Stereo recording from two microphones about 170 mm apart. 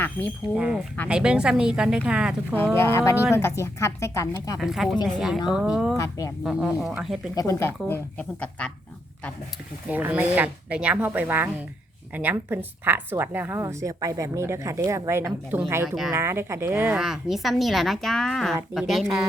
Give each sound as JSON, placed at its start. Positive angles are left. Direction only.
{"t": 0.0, "sound": "a sound", "side_deg": 10}
{"t": 0.5, "sound": "a woman's voice", "side_deg": -5}
{"t": 2.7, "sound": "speech", "side_deg": 15}
{"t": 4.6, "sound": "a woman's voice", "side_deg": 0}
{"t": 6.0, "sound": "speech", "side_deg": 20}
{"t": 6.4, "sound": "a woman's voice", "side_deg": -5}
{"t": 7.3, "sound": "speech", "side_deg": 15}
{"t": 9.9, "sound": "a woman's voice", "side_deg": -10}